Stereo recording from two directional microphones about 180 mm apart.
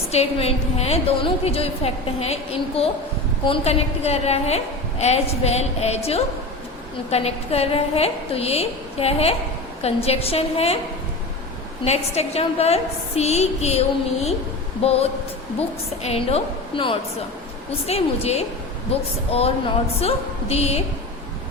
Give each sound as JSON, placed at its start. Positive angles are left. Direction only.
{"t": 0.1, "sound": "a woman's voice", "side_deg": 35}
{"t": 11.9, "sound": "a woman's voice", "side_deg": 35}
{"t": 16.0, "sound": "a woman's voice", "side_deg": 35}